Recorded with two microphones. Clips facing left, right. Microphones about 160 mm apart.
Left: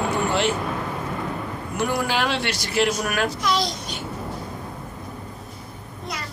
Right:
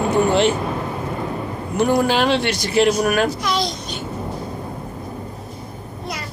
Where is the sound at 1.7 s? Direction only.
25° right (ahead or behind).